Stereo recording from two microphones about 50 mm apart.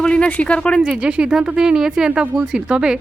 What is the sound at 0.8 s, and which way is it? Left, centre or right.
Speech, centre.